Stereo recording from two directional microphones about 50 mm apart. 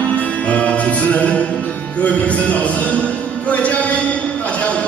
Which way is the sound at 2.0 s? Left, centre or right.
Left.